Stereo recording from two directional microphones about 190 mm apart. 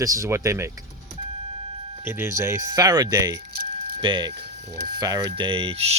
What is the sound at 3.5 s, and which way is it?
Keys jangling, 50° right (ahead or behind).